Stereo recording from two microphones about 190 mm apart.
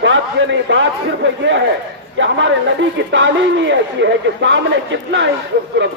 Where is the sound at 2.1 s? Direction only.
75° right (ahead or behind).